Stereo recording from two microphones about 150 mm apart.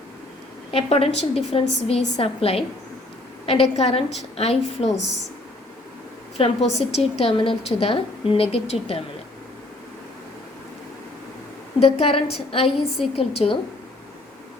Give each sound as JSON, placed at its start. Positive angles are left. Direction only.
{"t": 0.7, "sound": "a woman's voice", "side_deg": 40}
{"t": 6.3, "sound": "a woman's voice", "side_deg": 45}
{"t": 11.8, "sound": "a woman's voice", "side_deg": 40}